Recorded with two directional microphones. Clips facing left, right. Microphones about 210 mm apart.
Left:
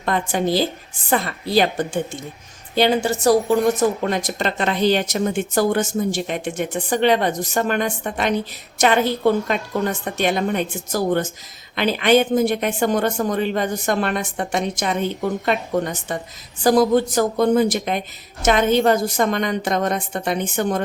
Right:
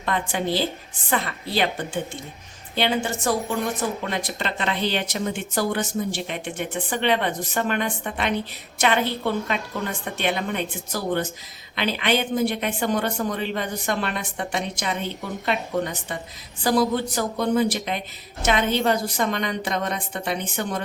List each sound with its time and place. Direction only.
0.0 s a woman's voice: 40° left (ahead or behind)